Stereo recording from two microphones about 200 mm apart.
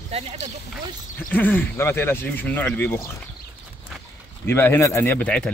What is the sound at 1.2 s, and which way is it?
Speech, 10° left (ahead or behind).